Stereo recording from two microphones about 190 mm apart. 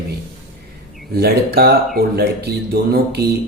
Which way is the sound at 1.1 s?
55° right (ahead or behind).